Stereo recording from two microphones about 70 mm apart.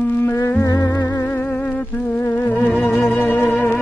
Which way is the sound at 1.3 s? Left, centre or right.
Left.